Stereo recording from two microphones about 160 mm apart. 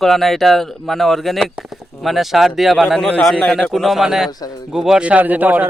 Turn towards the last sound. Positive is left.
turn(degrees=-10)  # may be behind; listen again after turning